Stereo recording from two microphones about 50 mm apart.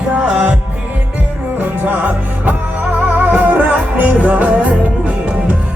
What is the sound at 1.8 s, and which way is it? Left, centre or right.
Music, right.